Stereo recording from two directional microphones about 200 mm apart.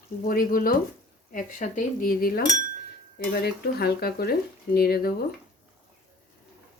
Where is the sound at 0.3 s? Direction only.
45° left (ahead or behind).